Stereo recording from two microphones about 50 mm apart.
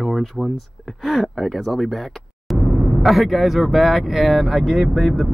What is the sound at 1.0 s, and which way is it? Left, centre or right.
Speech, centre.